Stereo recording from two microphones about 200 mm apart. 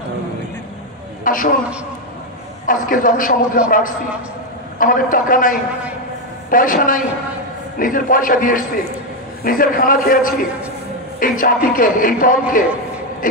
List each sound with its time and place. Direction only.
1.2 s a man's voice: 45° left (ahead or behind)
2.6 s a man's voice: 40° left (ahead or behind)
4.7 s a man's voice: 45° left (ahead or behind)